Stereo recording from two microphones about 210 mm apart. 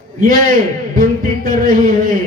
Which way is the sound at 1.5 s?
40° right (ahead or behind).